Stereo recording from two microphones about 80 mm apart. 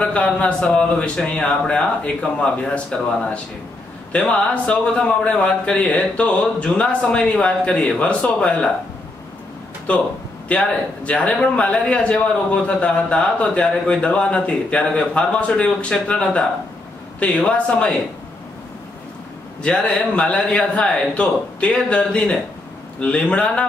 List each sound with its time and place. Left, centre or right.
0.0 s a man's voice: centre
10.5 s a man's voice: centre
19.6 s a man's voice: centre